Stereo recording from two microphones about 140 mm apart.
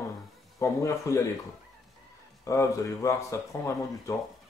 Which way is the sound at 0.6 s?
20° left (ahead or behind).